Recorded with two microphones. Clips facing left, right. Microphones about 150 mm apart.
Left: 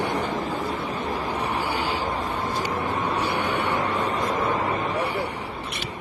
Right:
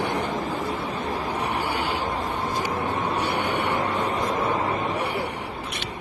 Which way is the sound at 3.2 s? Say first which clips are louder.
Even; 65° right (ahead or behind).